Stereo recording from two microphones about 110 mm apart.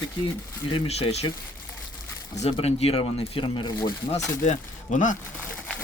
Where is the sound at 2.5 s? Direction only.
70° left (ahead or behind); by 3.9 s 45° left (ahead or behind).